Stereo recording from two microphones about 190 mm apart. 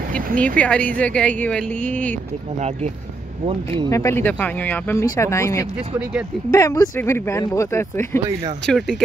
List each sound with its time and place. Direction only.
0.6 s speech: 5° left (ahead or behind)
3.4 s speech: 25° right (ahead or behind)
3.9 s speech: 15° left (ahead or behind)
8.6 s speech: centre (ahead or behind)